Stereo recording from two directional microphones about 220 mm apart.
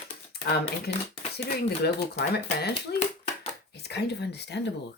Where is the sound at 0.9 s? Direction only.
45° left (ahead or behind).